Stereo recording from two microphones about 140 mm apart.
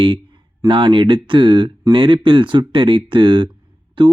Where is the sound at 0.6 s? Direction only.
35° right (ahead or behind).